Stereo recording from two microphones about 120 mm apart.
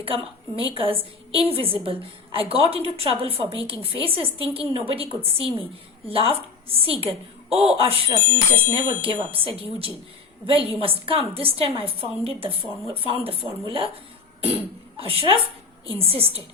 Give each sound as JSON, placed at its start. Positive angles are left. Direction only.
{"t": 0.0, "sound": "a woman's voice", "side_deg": -50}